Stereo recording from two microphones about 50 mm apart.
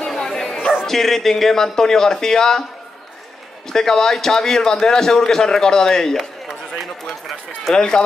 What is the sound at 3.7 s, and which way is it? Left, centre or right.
A man's voice, centre.